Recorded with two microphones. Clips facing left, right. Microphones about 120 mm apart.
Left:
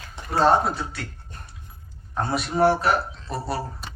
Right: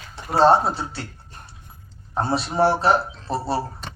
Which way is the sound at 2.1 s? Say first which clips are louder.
Right 2 dB; 30° right (ahead or behind).